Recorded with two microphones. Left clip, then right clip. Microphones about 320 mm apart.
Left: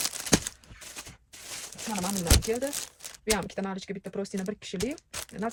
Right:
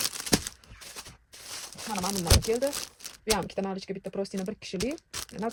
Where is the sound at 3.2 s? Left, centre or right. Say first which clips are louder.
Right 1 dB; centre.